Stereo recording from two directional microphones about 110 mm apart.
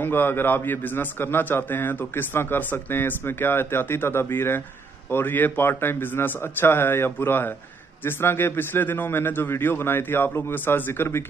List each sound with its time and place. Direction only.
0.0 s a man's voice: 20° left (ahead or behind)